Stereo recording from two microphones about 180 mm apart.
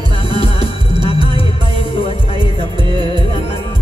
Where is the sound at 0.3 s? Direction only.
30° left (ahead or behind).